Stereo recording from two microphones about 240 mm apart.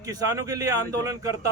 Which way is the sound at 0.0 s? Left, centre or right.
Centre.